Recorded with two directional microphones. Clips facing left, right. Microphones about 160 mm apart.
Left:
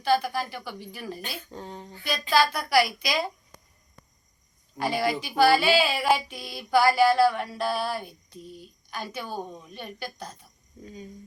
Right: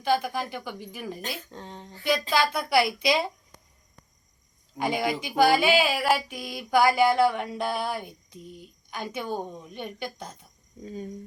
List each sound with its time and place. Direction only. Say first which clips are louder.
0.0 s speech: left 1 dB; 15° right (ahead or behind)
1.5 s speech: left 2 dB; 5° left (ahead or behind)
2.3 s a woman's voice: left 4 dB; 20° right (ahead or behind)
4.8 s speech: even; 15° right (ahead or behind)